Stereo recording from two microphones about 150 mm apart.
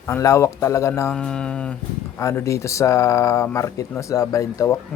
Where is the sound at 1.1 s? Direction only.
5° left (ahead or behind).